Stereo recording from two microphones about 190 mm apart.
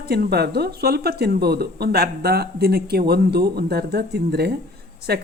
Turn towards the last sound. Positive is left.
turn(degrees=-55)  # may be behind; listen again after turning